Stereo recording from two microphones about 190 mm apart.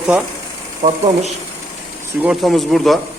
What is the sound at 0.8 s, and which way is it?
Speech, 45° right (ahead or behind).